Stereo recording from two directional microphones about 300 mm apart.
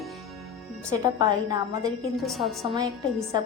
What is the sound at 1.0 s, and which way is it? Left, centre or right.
Speech, centre.